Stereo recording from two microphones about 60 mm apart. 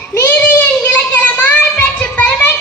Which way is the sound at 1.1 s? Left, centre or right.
Left.